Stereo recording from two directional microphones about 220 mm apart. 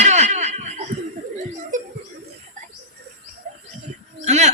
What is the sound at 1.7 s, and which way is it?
Chuckle, 35° right (ahead or behind).